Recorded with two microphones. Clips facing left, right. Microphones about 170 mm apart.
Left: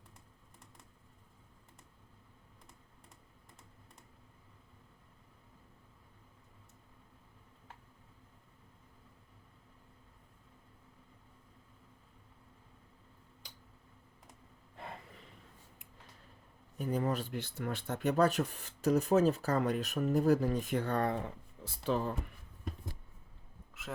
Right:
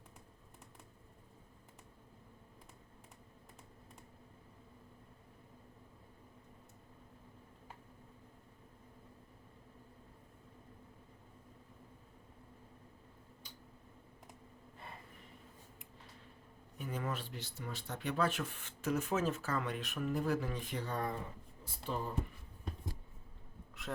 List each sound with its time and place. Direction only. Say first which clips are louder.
16.7 s speech: left 7 dB; 40° left (ahead or behind); by 21.2 s 70° left (ahead or behind)
21.6 s speech: left 7 dB; 90° left
23.8 s a sound: even; centre (ahead or behind)